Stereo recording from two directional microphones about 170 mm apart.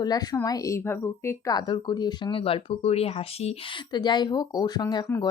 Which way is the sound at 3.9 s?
25° left (ahead or behind).